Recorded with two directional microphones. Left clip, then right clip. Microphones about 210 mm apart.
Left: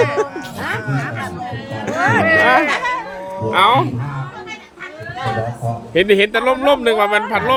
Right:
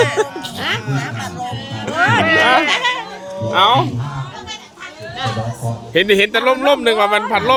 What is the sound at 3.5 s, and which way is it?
Speech, 10° left (ahead or behind).